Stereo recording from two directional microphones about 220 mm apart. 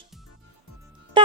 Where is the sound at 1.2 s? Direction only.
20° right (ahead or behind).